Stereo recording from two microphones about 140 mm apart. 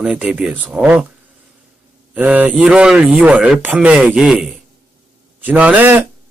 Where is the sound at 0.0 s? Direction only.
5° right (ahead or behind).